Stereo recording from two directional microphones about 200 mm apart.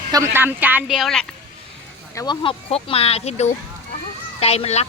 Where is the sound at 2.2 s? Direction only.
25° left (ahead or behind).